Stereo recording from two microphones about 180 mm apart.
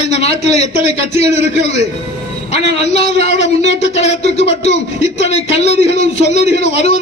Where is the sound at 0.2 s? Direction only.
35° left (ahead or behind).